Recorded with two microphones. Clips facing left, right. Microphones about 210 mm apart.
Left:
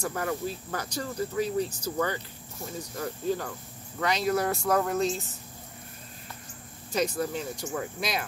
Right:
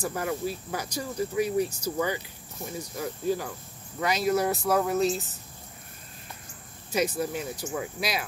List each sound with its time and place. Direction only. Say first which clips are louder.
0.0 s speech: right 1 dB; 5° right (ahead or behind)
3.0 s speech: right 1 dB; 10° right (ahead or behind)
6.9 s speech: right 1 dB; 10° right (ahead or behind)